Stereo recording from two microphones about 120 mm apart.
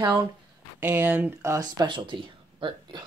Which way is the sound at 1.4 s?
30° right (ahead or behind).